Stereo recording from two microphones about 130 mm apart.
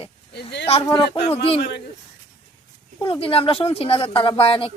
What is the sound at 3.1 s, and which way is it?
A woman's voice, 45° left (ahead or behind).